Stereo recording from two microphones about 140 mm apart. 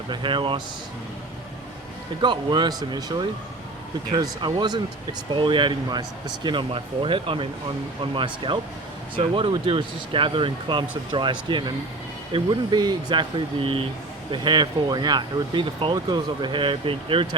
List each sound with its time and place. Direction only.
0.1 s speech: 35° right (ahead or behind)
2.2 s speech: 35° right (ahead or behind)